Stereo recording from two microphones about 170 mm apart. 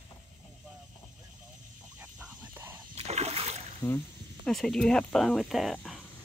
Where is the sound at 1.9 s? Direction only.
10° right (ahead or behind).